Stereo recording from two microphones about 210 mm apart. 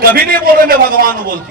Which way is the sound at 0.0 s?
45° right (ahead or behind).